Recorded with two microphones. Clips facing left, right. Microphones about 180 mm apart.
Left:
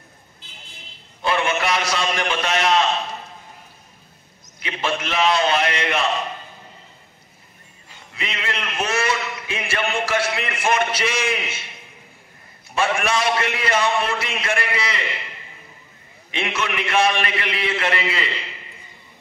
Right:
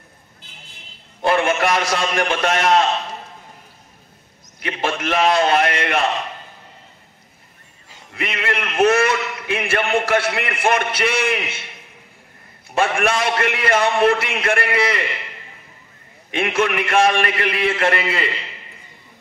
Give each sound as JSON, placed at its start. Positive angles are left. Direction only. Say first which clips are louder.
{"t": 1.2, "sound": "a man's voice", "louder": "right 4 dB", "side_deg": -50}
{"t": 4.6, "sound": "a man's voice", "louder": "right 2 dB", "side_deg": -50}
{"t": 8.1, "sound": "a man's voice", "louder": "right 5 dB", "side_deg": -55}
{"t": 12.7, "sound": "a man's voice", "louder": "right 2 dB", "side_deg": -55}
{"t": 16.3, "sound": "a man's voice", "louder": "right 6 dB", "side_deg": -50}